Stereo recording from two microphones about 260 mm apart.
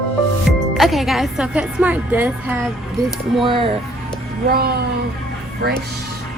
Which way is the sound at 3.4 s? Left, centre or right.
Centre.